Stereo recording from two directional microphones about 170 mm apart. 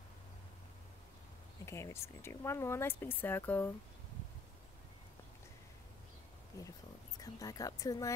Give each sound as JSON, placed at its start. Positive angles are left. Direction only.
{"t": 1.7, "sound": "speech", "side_deg": 15}
{"t": 7.2, "sound": "speech", "side_deg": 20}